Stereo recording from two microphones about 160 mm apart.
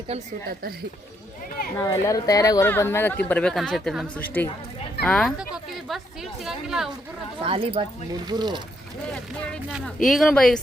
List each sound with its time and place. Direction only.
1.8 s speech: 20° left (ahead or behind); by 6.9 s 5° right (ahead or behind)
7.4 s speech: 35° right (ahead or behind)
9.8 s speech: centre (ahead or behind)